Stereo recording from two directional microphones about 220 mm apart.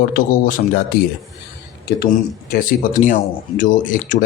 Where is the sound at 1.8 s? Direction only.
45° left (ahead or behind).